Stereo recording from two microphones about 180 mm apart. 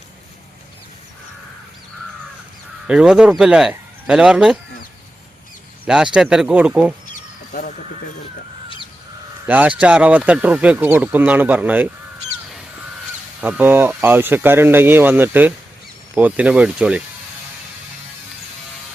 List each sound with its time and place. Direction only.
2.8 s speech: 5° right (ahead or behind)
5.8 s speech: 5° right (ahead or behind)
7.1 s a sound: 50° left (ahead or behind)
9.5 s speech: 10° right (ahead or behind)
13.4 s speech: 10° right (ahead or behind)